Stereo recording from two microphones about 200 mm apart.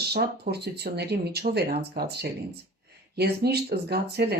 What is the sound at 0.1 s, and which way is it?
Speech, 55° right (ahead or behind).